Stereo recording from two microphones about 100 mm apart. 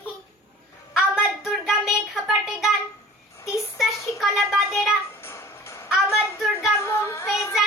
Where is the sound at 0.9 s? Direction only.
5° right (ahead or behind).